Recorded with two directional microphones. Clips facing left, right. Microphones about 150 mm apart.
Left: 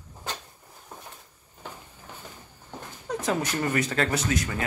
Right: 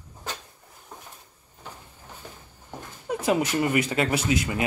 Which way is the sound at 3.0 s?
10° right (ahead or behind).